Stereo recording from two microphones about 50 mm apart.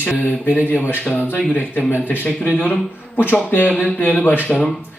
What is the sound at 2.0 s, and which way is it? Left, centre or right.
Speech, left.